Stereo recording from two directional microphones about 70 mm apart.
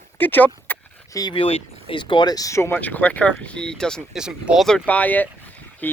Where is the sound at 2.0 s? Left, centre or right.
Left.